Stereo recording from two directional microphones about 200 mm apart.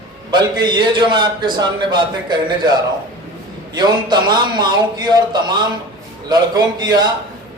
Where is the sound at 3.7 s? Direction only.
20° right (ahead or behind).